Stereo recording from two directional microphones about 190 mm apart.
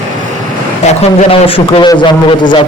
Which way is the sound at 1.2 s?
30° left (ahead or behind).